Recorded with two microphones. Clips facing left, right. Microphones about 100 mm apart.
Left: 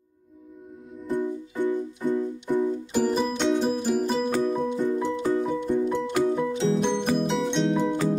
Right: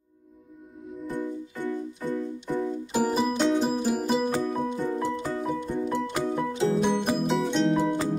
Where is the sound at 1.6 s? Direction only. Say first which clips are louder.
Left 4 dB; 15° left (ahead or behind).